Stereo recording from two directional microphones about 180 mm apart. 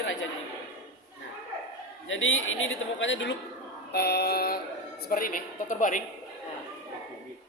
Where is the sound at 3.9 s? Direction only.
65° left (ahead or behind).